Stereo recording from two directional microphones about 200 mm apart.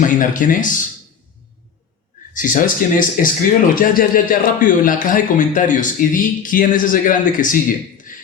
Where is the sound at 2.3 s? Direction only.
40° left (ahead or behind).